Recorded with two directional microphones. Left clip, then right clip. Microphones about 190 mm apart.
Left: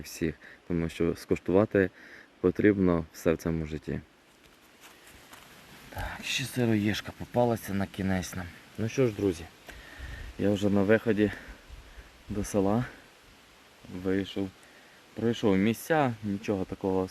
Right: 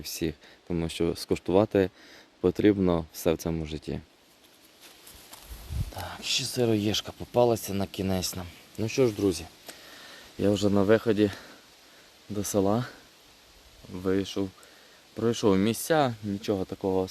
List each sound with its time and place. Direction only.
0.0 s speech: 15° right (ahead or behind)
6.0 s speech: 10° right (ahead or behind); by 12.9 s 25° right (ahead or behind)
14.0 s speech: 35° right (ahead or behind); by 17.1 s 15° right (ahead or behind)